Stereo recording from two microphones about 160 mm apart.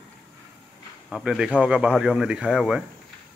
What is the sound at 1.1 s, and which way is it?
Speech, 5° right (ahead or behind).